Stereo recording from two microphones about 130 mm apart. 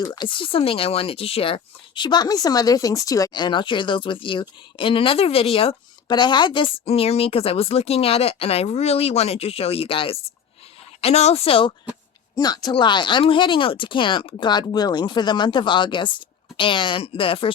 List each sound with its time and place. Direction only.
0.0 s speech: 35° left (ahead or behind)
12.4 s speech: 30° left (ahead or behind)